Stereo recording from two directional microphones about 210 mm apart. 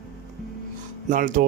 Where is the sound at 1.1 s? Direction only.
40° right (ahead or behind).